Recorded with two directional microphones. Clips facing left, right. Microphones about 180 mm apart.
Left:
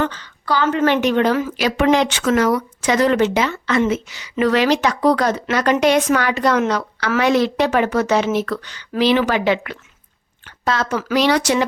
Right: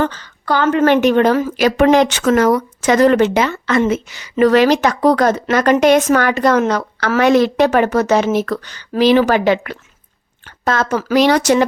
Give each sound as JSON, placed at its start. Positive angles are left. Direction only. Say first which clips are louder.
{"t": 0.0, "sound": "a woman's voice", "louder": "right 3 dB", "side_deg": -45}